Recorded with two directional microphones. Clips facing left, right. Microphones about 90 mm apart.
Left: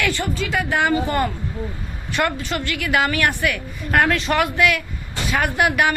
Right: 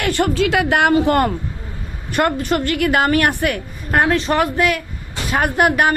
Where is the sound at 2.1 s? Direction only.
50° right (ahead or behind).